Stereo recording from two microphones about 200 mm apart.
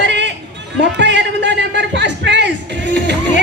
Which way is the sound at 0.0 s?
60° right (ahead or behind).